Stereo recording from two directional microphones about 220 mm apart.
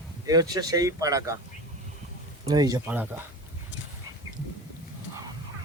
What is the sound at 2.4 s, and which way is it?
Speech, 15° right (ahead or behind).